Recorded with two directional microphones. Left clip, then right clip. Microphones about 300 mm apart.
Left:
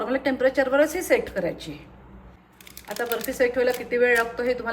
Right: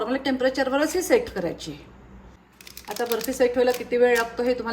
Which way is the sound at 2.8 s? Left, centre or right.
Centre.